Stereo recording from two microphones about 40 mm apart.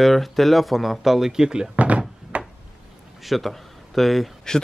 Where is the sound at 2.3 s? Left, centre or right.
Right.